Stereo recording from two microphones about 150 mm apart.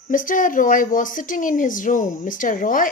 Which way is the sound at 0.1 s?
65° left (ahead or behind).